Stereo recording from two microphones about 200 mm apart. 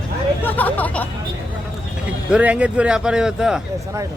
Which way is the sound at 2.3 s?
5° right (ahead or behind).